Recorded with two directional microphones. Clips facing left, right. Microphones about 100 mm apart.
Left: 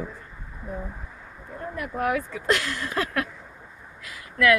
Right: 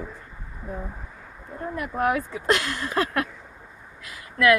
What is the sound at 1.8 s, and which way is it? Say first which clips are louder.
Speech: right 2 dB; 35° right (ahead or behind).